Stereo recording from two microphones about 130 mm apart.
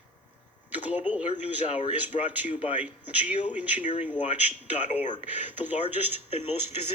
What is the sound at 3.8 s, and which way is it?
Speech, 70° left (ahead or behind).